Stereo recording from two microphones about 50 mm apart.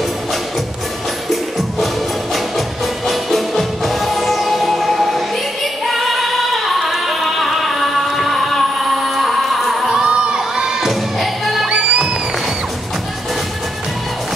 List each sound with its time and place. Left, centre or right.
3.1 s music: centre
9.8 s crowd: centre
10.8 s music: centre
11.7 s music: centre